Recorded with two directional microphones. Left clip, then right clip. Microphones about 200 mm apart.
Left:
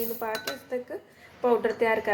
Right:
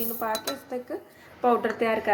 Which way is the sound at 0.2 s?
20° right (ahead or behind).